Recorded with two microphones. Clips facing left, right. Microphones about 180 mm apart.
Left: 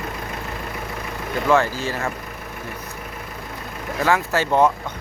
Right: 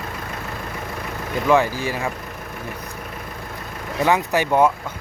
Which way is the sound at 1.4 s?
15° right (ahead or behind).